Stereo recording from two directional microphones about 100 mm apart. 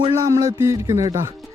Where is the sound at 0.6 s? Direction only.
35° right (ahead or behind).